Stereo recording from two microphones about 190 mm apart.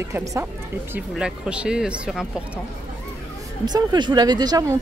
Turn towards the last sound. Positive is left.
turn(degrees=-20)  # may be behind; listen again after turning